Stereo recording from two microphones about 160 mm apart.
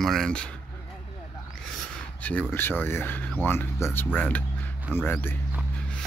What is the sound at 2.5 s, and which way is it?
Speech, 15° left (ahead or behind).